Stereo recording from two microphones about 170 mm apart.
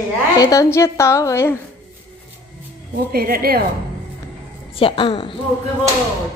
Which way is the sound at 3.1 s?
60° right (ahead or behind).